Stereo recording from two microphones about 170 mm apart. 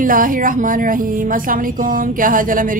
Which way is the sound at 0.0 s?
55° right (ahead or behind).